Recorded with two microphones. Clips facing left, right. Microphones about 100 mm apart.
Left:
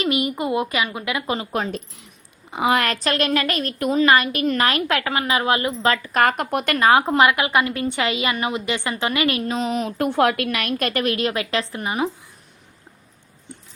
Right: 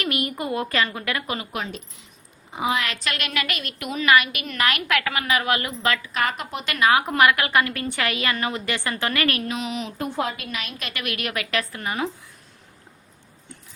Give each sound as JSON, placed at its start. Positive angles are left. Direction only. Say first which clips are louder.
{"t": 0.0, "sound": "a woman's voice", "louder": "left 5 dB", "side_deg": 20}
{"t": 1.3, "sound": "a woman's voice", "louder": "left 5 dB", "side_deg": 30}
{"t": 2.5, "sound": "a woman's voice", "louder": "left 5 dB", "side_deg": 70}
{"t": 2.8, "sound": "a woman's voice", "louder": "left 7 dB", "side_deg": 40}
{"t": 6.1, "sound": "speech", "louder": "left 7 dB", "side_deg": 50}
{"t": 6.7, "sound": "a woman's voice", "louder": "left 3 dB", "side_deg": 30}
{"t": 9.5, "sound": "a woman's voice", "louder": "left 5 dB", "side_deg": 35}
{"t": 10.0, "sound": "a woman's voice", "louder": "left 10 dB", "side_deg": 70}
{"t": 11.0, "sound": "a woman's voice", "louder": "left 7 dB", "side_deg": 30}